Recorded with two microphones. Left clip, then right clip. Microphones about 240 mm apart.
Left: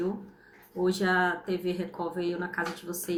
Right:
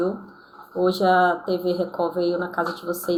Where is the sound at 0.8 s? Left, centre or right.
Left.